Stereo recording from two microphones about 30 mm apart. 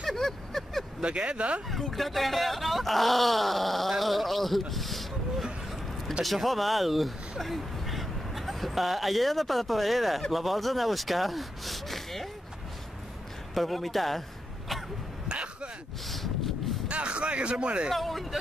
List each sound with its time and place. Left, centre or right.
0.1 s vehicle: centre
1.0 s speech: right
1.7 s speech: centre
6.2 s speech: centre
13.6 s speech: centre
15.2 s a sound: right
16.1 s a sound: centre
16.8 s a sound: right
17.9 s speech: centre